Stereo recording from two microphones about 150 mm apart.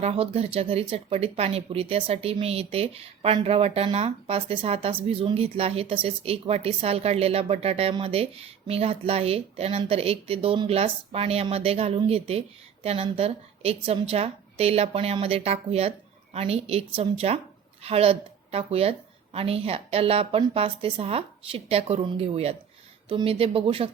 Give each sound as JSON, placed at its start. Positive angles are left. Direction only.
{"t": 0.0, "sound": "a woman's voice", "side_deg": -40}